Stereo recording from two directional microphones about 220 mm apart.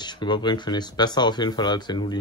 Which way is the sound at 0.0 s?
20° left (ahead or behind).